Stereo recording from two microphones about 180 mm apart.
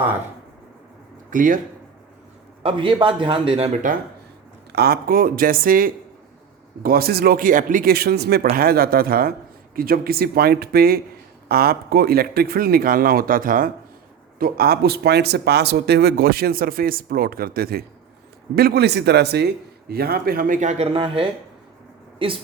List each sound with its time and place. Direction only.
1.3 s speech: 50° right (ahead or behind)
2.6 s a man's voice: 30° right (ahead or behind)
4.7 s speech: 60° right (ahead or behind); by 21.2 s 30° right (ahead or behind)